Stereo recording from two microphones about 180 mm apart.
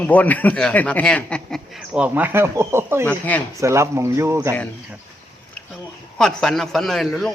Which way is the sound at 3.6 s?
15° right (ahead or behind).